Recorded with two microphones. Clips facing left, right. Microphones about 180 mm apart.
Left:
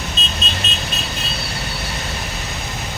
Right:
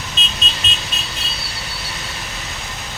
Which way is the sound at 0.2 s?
40° left (ahead or behind).